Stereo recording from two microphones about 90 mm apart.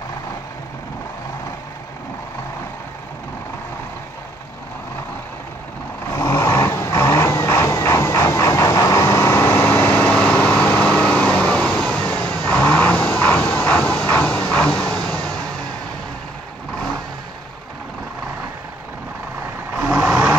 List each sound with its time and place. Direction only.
6.1 s vehicle: 40° left (ahead or behind); by 15.3 s 10° left (ahead or behind)
19.8 s vehicle: 15° right (ahead or behind)